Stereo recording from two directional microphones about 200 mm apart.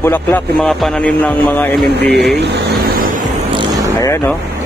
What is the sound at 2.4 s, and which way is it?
Vehicle, 50° right (ahead or behind).